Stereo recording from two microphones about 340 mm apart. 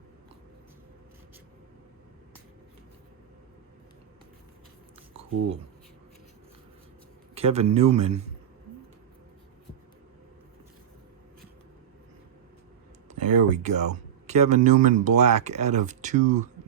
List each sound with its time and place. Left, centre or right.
7.3 s a man's voice: centre
13.1 s a sound: right
13.5 s speech: right